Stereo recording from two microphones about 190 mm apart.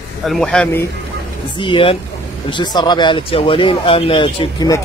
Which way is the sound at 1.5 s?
25° left (ahead or behind).